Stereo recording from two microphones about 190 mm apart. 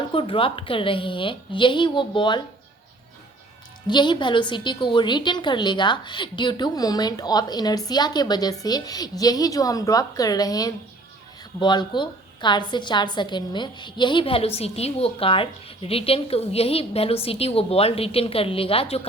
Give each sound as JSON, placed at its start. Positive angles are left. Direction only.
{"t": 0.1, "sound": "a woman's voice", "side_deg": 25}
{"t": 3.8, "sound": "a woman's voice", "side_deg": 25}